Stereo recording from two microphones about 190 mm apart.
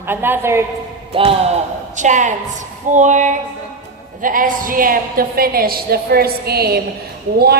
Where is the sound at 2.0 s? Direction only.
40° right (ahead or behind).